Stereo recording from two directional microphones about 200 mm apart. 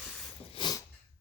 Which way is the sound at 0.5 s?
20° left (ahead or behind).